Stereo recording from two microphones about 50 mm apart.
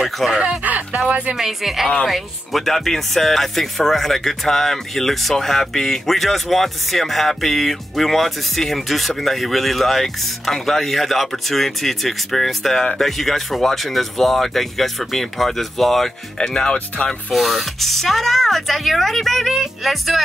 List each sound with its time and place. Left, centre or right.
0.3 s speech: centre
0.7 s speech: right
1.3 s speech: centre
2.6 s speech: centre
16.3 s speech: centre
17.3 s speech: centre